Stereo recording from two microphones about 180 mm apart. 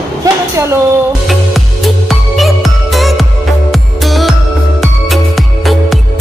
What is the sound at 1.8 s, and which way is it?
Music, centre (ahead or behind).